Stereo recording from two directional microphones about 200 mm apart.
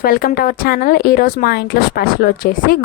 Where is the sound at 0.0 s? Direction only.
45° left (ahead or behind).